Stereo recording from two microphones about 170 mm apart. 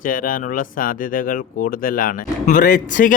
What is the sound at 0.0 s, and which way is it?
A man's voice, 55° left (ahead or behind).